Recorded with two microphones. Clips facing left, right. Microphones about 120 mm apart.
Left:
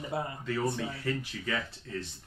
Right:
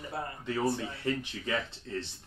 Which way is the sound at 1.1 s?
25° right (ahead or behind).